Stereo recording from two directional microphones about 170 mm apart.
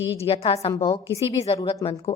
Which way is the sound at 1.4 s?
35° left (ahead or behind).